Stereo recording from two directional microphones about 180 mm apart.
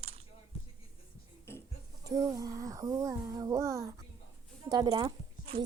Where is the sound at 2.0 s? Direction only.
20° right (ahead or behind).